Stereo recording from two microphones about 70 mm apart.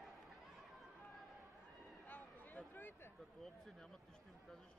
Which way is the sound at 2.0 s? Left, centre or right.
Left.